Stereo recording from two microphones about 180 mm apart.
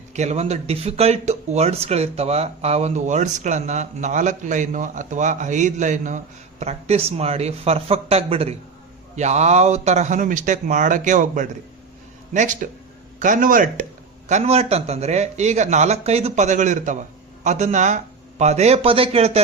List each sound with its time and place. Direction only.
0.1 s a man's voice: 40° right (ahead or behind)